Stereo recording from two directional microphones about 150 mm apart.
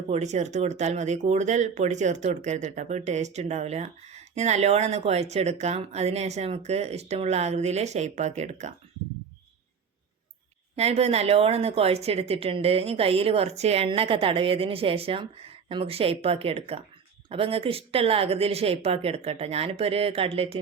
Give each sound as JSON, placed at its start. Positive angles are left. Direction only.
{"t": 0.1, "sound": "speech", "side_deg": -50}
{"t": 10.8, "sound": "a woman's voice", "side_deg": -45}